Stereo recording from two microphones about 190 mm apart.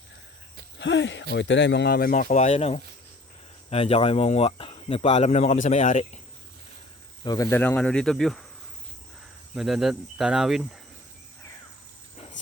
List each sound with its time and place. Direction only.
0.8 s speech: 75° left (ahead or behind); by 6.1 s 40° left (ahead or behind)
7.3 s speech: 15° left (ahead or behind); by 8.4 s centre (ahead or behind)
9.6 s speech: centre (ahead or behind)
12.1 s a sound: 35° left (ahead or behind)